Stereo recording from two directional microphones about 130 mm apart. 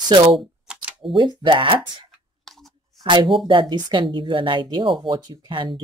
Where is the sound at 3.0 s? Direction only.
35° right (ahead or behind).